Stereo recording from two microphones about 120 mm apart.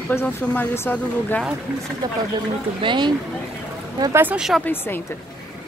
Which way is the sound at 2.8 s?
40° right (ahead or behind).